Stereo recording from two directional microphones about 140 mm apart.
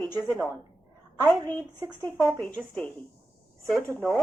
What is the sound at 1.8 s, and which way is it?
Speech, 25° right (ahead or behind).